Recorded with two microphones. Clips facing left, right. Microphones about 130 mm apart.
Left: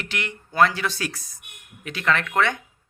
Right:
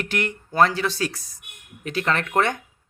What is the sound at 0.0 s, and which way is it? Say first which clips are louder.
Speech: right 5 dB; 45° right (ahead or behind).